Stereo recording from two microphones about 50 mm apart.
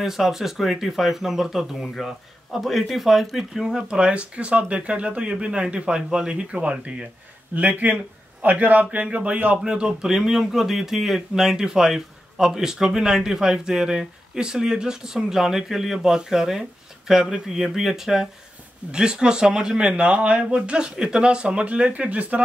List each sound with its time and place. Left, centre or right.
0.0 s speech: centre
3.6 s a man's voice: centre; by 8.8 s right
8.9 s speech: right